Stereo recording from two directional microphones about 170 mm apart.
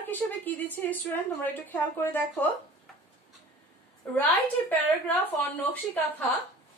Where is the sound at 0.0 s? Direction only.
10° left (ahead or behind).